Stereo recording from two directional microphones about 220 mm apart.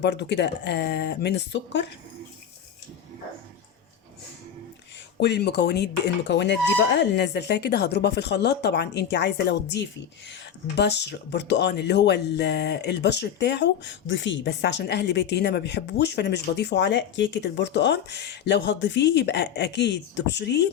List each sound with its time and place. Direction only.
0.0 s speech: 50° left (ahead or behind)
5.2 s speech: 50° left (ahead or behind)